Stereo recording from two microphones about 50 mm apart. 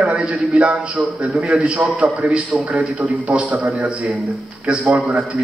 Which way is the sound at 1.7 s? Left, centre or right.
Right.